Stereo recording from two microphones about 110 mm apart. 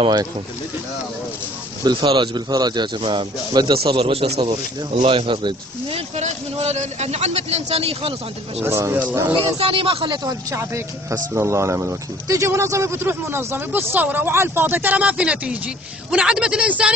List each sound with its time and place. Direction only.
1.9 s speech: 45° right (ahead or behind)
3.0 s speech: 50° right (ahead or behind)
3.8 s a man's voice: 60° right (ahead or behind)
5.9 s a man's voice: 85° right; by 8.1 s 65° right (ahead or behind)
8.6 s speech: 20° right (ahead or behind)
9.3 s speech: 55° right (ahead or behind)
10.5 s speech: 25° right (ahead or behind); by 16.9 s 10° right (ahead or behind)